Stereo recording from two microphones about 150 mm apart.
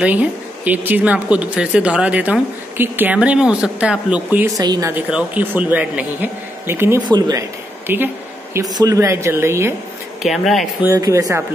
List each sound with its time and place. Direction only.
0.0 s speech: 10° right (ahead or behind)
4.6 s speech: 25° right (ahead or behind)
4.9 s speech: 10° right (ahead or behind)
7.1 s speech: 25° right (ahead or behind)
7.8 s speech: 15° right (ahead or behind)
10.2 s speech: centre (ahead or behind)
10.8 s speech: 20° right (ahead or behind)